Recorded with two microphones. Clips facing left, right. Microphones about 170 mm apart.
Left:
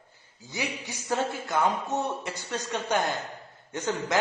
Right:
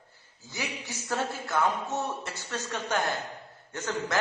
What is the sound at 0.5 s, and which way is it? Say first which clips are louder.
A man's voice: left 3 dB; 15° left (ahead or behind).